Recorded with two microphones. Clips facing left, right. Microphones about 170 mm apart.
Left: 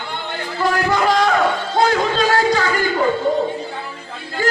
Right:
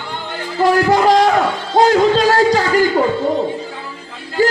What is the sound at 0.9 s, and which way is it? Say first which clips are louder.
Music: right 3 dB; 35° right (ahead or behind).